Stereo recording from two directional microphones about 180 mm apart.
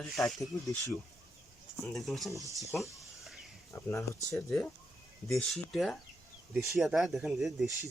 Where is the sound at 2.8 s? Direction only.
15° left (ahead or behind).